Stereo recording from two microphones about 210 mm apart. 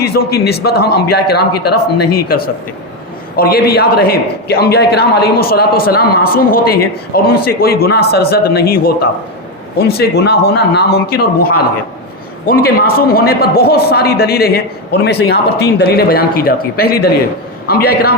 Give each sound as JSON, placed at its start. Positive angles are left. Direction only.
{"t": 0.0, "sound": "a man's voice", "side_deg": 50}